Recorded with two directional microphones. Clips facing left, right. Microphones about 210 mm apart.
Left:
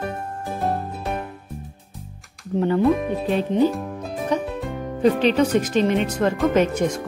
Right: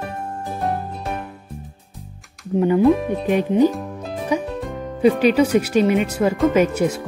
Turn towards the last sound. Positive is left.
turn(degrees=-5)  # may be behind; listen again after turning